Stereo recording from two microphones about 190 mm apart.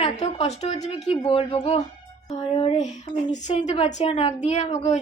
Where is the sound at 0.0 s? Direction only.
35° left (ahead or behind).